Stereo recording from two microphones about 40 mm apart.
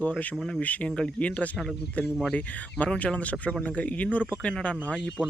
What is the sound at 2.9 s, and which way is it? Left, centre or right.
Speech, left.